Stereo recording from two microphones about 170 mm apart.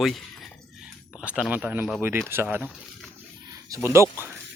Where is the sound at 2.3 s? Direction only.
15° right (ahead or behind).